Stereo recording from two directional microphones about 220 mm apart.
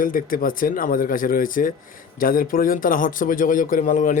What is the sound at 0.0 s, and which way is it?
Speech, 40° left (ahead or behind).